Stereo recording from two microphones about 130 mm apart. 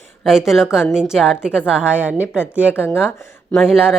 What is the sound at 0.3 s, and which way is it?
A woman's voice, 5° right (ahead or behind).